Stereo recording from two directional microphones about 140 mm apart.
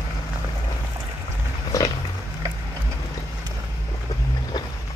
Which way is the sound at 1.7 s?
25° left (ahead or behind).